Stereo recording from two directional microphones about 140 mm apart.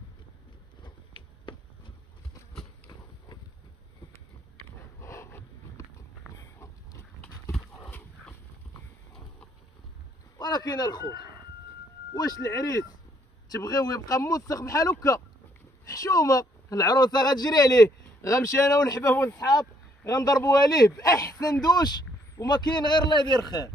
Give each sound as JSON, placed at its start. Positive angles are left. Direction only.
{"t": 0.8, "sound": "a sound", "side_deg": 35}
{"t": 5.0, "sound": "a sound", "side_deg": 20}
{"t": 6.6, "sound": "pig", "side_deg": 20}
{"t": 7.5, "sound": "horse", "side_deg": 10}
{"t": 10.3, "sound": "speech", "side_deg": 30}
{"t": 12.1, "sound": "a man's voice", "side_deg": 25}